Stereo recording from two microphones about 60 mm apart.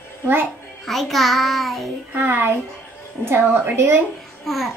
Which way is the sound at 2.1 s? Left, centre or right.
Right.